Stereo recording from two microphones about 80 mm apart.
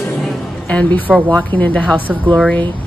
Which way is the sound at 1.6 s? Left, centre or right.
Centre.